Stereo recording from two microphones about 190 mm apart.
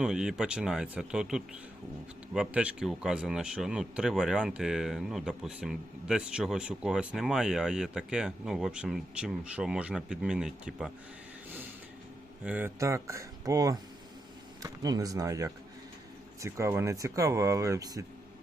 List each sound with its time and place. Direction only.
0.0 s speech: 5° right (ahead or behind)
12.5 s speech: 10° right (ahead or behind)